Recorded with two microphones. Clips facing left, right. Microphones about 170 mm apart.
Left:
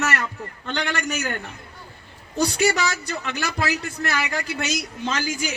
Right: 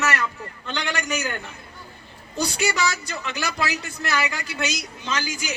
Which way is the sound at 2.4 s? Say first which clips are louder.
Left 3 dB; 50° left (ahead or behind).